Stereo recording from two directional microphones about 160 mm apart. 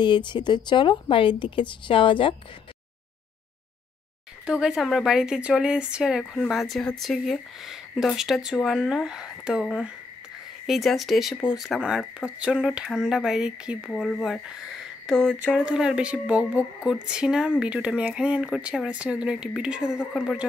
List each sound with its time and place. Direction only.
0.0 s speech: 30° left (ahead or behind)
4.5 s speech: 5° right (ahead or behind)